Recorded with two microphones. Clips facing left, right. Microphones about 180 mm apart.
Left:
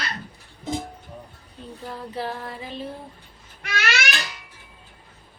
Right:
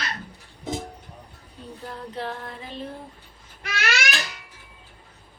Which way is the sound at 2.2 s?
5° left (ahead or behind).